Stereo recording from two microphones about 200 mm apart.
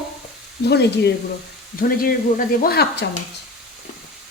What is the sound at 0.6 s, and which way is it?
Speech, 55° left (ahead or behind).